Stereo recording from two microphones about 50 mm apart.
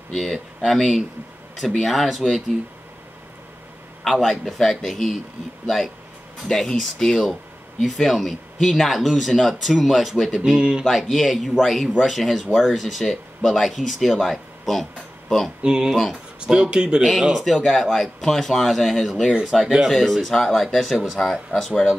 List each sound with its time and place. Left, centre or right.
0.1 s speech: centre
4.0 s speech: centre
6.4 s speech: centre
10.9 s speech: centre
15.6 s speech: centre
17.0 s speech: centre
18.2 s speech: centre